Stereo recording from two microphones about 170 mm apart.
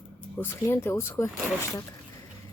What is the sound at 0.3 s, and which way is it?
Speech, 15° left (ahead or behind).